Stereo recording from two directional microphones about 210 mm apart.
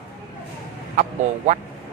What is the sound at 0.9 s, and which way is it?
Speech, 35° right (ahead or behind).